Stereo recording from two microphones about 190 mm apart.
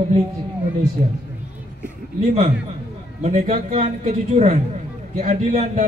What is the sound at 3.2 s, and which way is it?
A man's voice, 35° right (ahead or behind).